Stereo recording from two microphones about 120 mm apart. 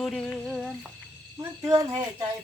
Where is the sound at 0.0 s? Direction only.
Centre (ahead or behind).